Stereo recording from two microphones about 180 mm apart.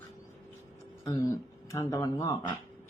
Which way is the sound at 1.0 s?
20° left (ahead or behind).